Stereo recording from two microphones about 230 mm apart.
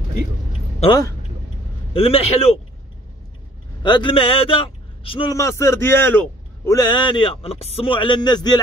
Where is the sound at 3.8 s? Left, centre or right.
Centre.